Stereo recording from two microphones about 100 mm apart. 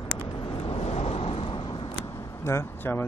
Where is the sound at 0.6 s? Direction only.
80° left; by 2.0 s 60° left (ahead or behind).